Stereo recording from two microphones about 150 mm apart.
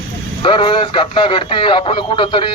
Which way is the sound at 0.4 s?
35° left (ahead or behind).